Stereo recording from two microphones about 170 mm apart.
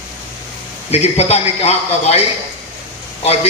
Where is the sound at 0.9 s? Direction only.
40° left (ahead or behind).